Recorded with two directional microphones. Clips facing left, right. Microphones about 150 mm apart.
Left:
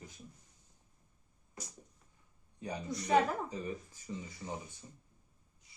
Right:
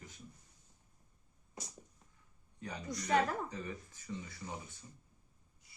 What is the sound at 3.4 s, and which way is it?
Speech, 20° left (ahead or behind).